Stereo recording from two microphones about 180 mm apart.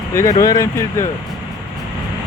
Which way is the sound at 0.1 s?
15° left (ahead or behind).